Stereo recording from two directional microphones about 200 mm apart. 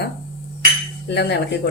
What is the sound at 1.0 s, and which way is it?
Speech, 55° left (ahead or behind).